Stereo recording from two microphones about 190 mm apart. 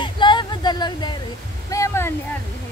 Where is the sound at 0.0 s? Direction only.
25° left (ahead or behind).